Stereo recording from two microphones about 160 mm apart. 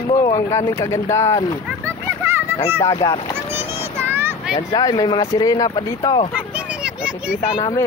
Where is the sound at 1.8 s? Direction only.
15° right (ahead or behind).